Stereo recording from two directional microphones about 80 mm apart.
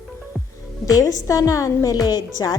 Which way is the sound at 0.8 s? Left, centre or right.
Left.